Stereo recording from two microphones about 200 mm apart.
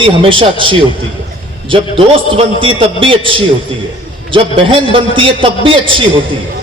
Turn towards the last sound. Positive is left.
turn(degrees=-25)  # may be behind; listen again after turning